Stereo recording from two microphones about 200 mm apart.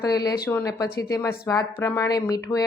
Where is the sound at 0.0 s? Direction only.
15° left (ahead or behind).